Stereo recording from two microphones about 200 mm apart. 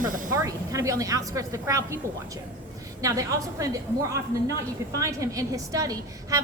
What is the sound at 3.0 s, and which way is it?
A woman's voice, 15° right (ahead or behind).